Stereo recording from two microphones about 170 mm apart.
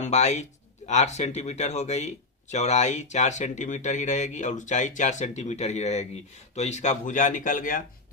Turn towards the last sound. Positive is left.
turn(degrees=50)  # may be behind; listen again after turning